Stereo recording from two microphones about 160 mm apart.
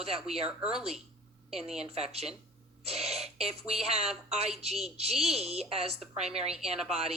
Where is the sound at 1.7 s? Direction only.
40° right (ahead or behind).